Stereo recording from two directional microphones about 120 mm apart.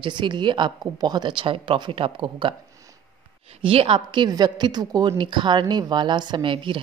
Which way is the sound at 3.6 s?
50° right (ahead or behind).